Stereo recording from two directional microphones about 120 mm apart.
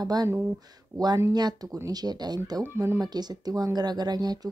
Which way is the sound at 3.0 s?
35° right (ahead or behind).